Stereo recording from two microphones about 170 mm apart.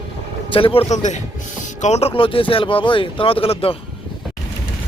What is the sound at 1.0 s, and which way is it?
Speech, 45° left (ahead or behind).